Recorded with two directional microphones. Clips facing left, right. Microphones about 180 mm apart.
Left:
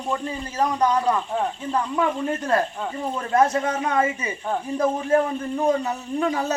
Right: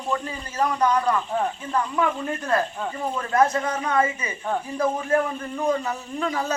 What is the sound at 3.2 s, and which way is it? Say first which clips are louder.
Speech: left 1 dB; 25° left (ahead or behind).